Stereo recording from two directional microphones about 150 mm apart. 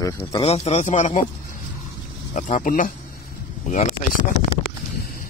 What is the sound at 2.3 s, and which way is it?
Speech, 60° left (ahead or behind).